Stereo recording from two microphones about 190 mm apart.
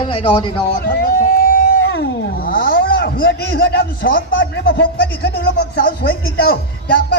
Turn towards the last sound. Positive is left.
turn(degrees=55)  # may be behind; listen again after turning